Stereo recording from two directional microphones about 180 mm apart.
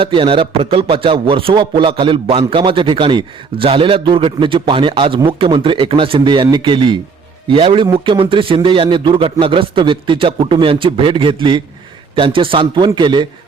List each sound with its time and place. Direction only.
0.0 s a man's voice: 30° right (ahead or behind)